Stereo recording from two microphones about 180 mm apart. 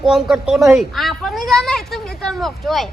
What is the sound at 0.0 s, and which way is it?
Speech, 5° right (ahead or behind).